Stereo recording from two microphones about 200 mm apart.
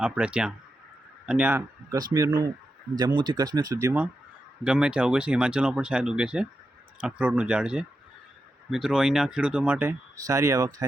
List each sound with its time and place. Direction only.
0.0 s speech: 5° right (ahead or behind)